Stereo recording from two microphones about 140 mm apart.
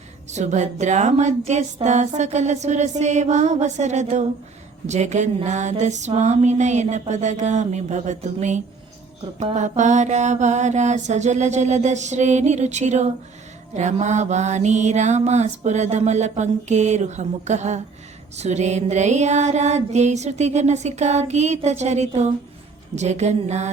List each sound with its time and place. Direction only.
0.3 s mantra: 55° right (ahead or behind)
18.3 s music: 55° right (ahead or behind)
23.0 s mantra: 55° right (ahead or behind)